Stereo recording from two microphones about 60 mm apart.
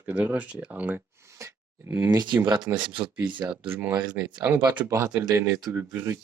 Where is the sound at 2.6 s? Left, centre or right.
Right.